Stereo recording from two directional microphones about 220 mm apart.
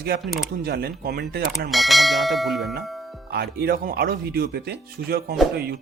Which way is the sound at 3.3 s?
45° right (ahead or behind).